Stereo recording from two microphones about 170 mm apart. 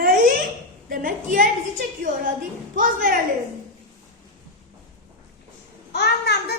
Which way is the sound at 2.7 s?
55° right (ahead or behind).